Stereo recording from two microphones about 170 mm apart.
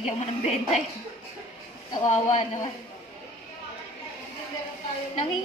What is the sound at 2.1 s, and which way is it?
Speech, 40° left (ahead or behind).